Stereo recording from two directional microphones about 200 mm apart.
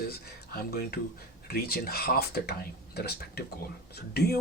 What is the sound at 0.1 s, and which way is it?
Speech, 50° left (ahead or behind).